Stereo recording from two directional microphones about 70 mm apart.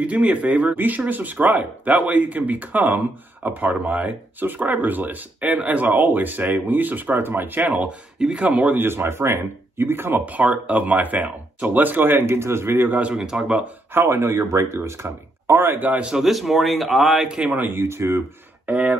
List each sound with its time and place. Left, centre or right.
0.0 s a man's voice: centre
13.1 s speech: centre
13.9 s speech: right
16.1 s a man's voice: centre
17.3 s speech: centre
17.6 s a man's voice: right
17.8 s speech: right
18.7 s a man's voice: right